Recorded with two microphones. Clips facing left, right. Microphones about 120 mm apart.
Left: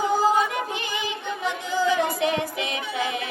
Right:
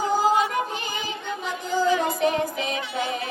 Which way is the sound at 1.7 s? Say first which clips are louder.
Right 1 dB; 45° right (ahead or behind).